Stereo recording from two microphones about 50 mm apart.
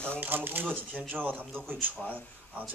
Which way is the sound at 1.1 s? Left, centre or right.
Right.